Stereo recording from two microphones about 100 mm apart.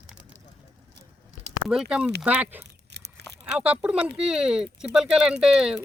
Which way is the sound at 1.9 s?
10° right (ahead or behind).